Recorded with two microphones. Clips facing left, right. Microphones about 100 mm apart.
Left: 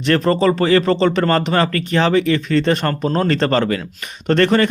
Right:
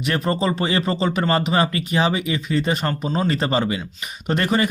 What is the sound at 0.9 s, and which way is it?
Speech, 5° right (ahead or behind).